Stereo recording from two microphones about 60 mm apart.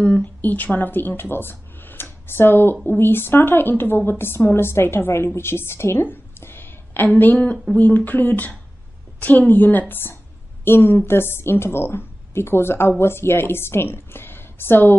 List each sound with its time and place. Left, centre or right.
0.2 s a woman's voice: left
6.4 s a sound: left
7.7 s a woman's voice: left